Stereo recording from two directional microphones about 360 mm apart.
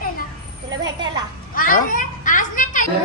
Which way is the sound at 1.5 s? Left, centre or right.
Left.